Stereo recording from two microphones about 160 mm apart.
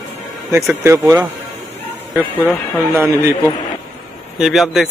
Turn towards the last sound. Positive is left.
turn(degrees=-5)  # may be behind; listen again after turning